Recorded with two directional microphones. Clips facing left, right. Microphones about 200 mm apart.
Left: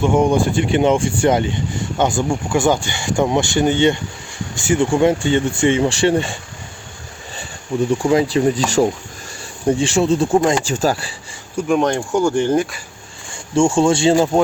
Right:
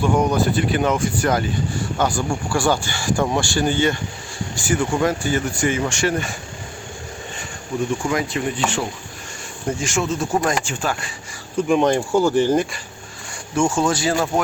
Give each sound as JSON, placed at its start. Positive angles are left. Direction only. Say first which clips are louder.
{"t": 0.0, "sound": "speech", "louder": "left 3 dB", "side_deg": 25}
{"t": 8.1, "sound": "speech", "louder": "left 8 dB", "side_deg": 30}
{"t": 11.7, "sound": "speech", "louder": "even", "side_deg": 0}
{"t": 13.6, "sound": "speech", "louder": "left 5 dB", "side_deg": 25}